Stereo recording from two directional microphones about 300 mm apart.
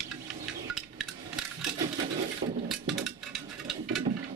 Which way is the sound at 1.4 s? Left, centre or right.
Centre.